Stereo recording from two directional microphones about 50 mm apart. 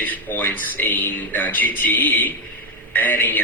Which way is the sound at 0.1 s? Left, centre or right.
Left.